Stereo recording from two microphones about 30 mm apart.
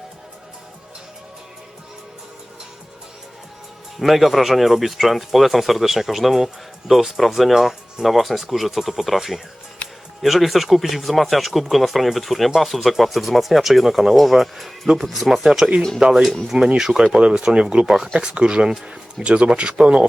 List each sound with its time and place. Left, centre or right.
4.0 s speech: centre
15.4 s speech: right
16.7 s speech: centre
17.1 s speech: right